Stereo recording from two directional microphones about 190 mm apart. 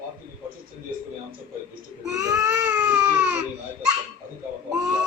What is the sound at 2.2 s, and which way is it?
Baby cry, 20° right (ahead or behind).